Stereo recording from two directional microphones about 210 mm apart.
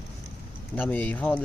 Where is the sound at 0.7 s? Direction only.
10° left (ahead or behind).